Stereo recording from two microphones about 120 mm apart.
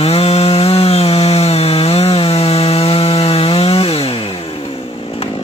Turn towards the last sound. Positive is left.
turn(degrees=55)  # may be behind; listen again after turning